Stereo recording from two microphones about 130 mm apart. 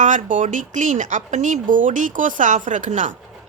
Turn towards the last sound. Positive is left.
turn(degrees=-70)  # may be behind; listen again after turning